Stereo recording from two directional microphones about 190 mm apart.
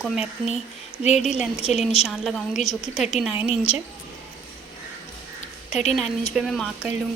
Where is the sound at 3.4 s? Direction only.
30° left (ahead or behind).